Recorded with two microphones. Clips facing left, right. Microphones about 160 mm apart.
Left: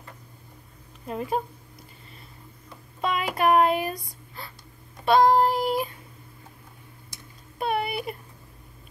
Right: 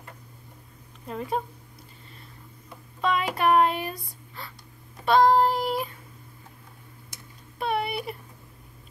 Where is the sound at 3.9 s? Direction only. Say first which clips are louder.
Left 3 dB; 35° left (ahead or behind).